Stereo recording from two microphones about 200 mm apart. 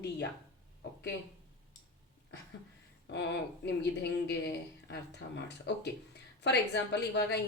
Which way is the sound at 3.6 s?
60° left (ahead or behind).